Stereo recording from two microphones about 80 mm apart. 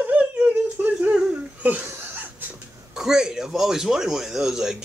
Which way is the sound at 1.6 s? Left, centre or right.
Right.